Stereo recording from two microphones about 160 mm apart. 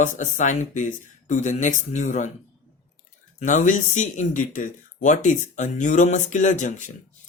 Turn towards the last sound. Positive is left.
turn(degrees=50)  # may be behind; listen again after turning